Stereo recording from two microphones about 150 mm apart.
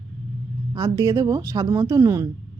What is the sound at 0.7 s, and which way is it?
A woman's voice, 25° right (ahead or behind).